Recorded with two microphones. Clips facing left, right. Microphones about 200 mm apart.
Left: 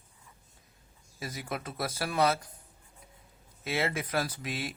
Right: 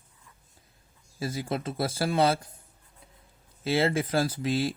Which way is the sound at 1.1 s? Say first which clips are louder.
Right 6 dB; 30° right (ahead or behind).